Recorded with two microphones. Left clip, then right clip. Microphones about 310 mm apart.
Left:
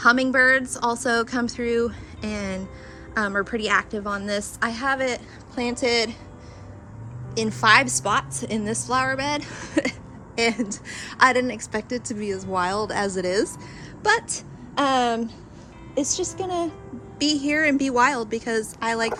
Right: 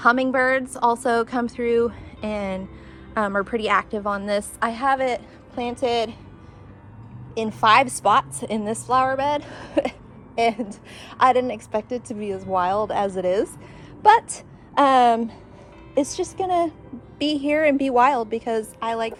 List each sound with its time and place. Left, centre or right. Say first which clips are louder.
0.0 s a woman's voice: left 1 dB; centre
7.3 s a woman's voice: right 1 dB; centre